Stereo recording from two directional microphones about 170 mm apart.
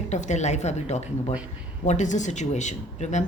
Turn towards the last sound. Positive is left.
turn(degrees=45)  # may be behind; listen again after turning